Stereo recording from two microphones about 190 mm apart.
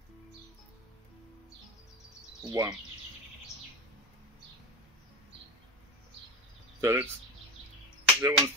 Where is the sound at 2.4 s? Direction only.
20° right (ahead or behind).